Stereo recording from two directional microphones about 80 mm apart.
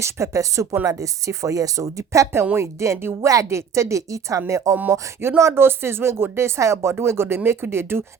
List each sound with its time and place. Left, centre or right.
0.0 s speech: right
4.8 s speech: right